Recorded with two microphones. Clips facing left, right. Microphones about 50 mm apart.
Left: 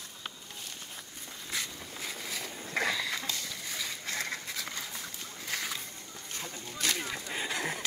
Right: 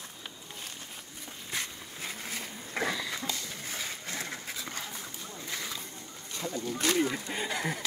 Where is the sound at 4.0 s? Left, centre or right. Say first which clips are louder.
Left 2 dB; left.